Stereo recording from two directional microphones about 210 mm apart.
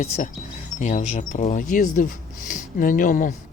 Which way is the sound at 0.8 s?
35° left (ahead or behind).